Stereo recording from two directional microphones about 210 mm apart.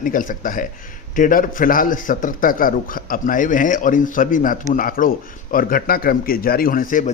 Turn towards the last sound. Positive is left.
turn(degrees=40)  # may be behind; listen again after turning